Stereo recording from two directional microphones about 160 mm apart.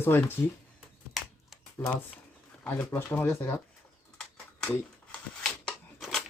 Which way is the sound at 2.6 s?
10° left (ahead or behind).